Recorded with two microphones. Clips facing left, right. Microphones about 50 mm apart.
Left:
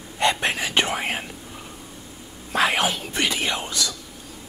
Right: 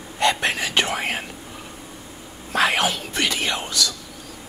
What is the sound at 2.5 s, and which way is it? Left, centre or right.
Whispering, centre.